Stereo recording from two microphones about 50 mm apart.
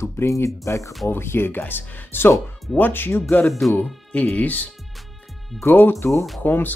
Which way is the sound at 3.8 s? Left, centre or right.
Left.